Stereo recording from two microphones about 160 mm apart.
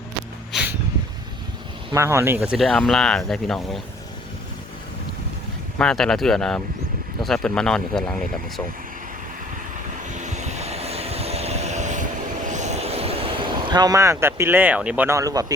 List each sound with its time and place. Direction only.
0.5 s a sound: centre (ahead or behind)
1.9 s speech: 15° right (ahead or behind); by 3.8 s centre (ahead or behind)
5.8 s speech: 5° left (ahead or behind)
10.1 s vehicle: 50° right (ahead or behind)
13.7 s speech: 25° right (ahead or behind)